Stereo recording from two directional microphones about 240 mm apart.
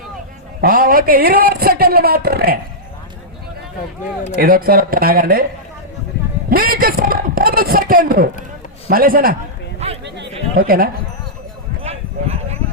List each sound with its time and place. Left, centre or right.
0.6 s a man's voice: right
4.4 s a man's voice: right
6.5 s a man's voice: right
9.8 s a sound: right
10.6 s a man's voice: right
11.8 s clip-clop: right